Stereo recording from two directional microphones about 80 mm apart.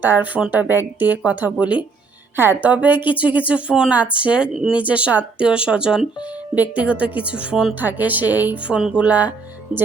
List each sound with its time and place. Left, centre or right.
0.0 s speech: right
2.3 s a woman's voice: right; by 7.8 s centre
7.8 s a woman's voice: right